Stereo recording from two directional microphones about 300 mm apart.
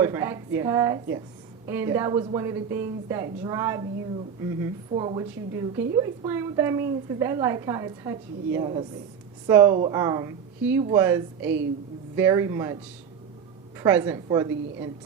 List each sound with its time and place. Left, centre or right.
0.0 s a woman's voice: centre
4.9 s a woman's voice: centre
13.8 s a woman's voice: centre